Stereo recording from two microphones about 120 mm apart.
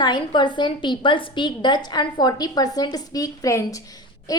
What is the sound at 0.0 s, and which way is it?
A woman's voice, 40° left (ahead or behind).